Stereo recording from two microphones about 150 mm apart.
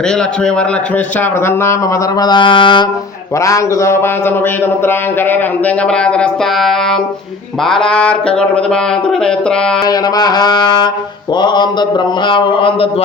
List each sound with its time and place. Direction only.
1.2 s speech: 15° left (ahead or behind)
2.1 s a man's voice: 30° left (ahead or behind)
3.4 s a sound: 20° left (ahead or behind)
4.6 s speech: 15° left (ahead or behind)
9.8 s a sound: 25° left (ahead or behind)
11.3 s a man's voice: 30° left (ahead or behind)